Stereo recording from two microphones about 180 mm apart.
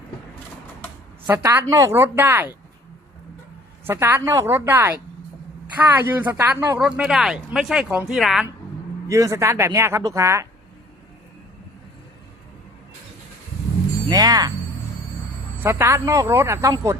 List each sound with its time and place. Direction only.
1.3 s speech: 15° right (ahead or behind)
3.8 s speech: 10° right (ahead or behind)
6.7 s speech: 5° right (ahead or behind)
9.0 s speech: 15° right (ahead or behind)
14.1 s speech: 20° right (ahead or behind)
15.6 s speech: 15° right (ahead or behind)